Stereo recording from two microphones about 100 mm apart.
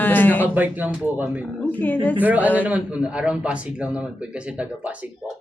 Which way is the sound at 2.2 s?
15° right (ahead or behind).